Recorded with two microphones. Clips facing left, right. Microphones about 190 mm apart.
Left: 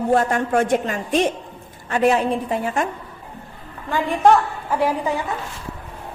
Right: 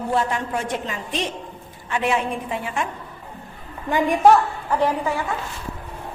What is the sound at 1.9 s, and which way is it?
Speech, 40° left (ahead or behind).